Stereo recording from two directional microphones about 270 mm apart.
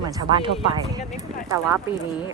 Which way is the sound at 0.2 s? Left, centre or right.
Centre.